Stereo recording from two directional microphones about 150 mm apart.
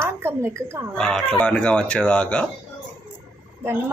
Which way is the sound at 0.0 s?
15° right (ahead or behind).